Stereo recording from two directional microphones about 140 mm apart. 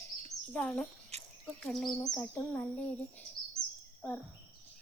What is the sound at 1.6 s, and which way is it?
Speech, 5° left (ahead or behind).